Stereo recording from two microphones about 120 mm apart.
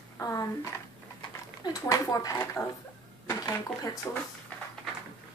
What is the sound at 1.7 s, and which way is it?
Speech, 30° left (ahead or behind).